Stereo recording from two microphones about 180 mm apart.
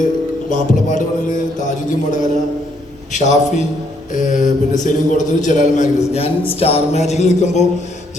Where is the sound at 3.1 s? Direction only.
40° left (ahead or behind).